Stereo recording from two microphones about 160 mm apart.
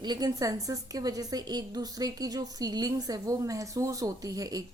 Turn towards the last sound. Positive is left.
turn(degrees=-20)  # may be behind; listen again after turning